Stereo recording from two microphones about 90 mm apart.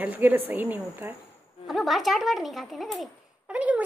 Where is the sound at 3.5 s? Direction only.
15° right (ahead or behind).